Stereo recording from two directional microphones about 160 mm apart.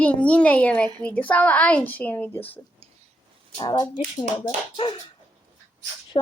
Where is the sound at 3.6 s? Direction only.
25° left (ahead or behind).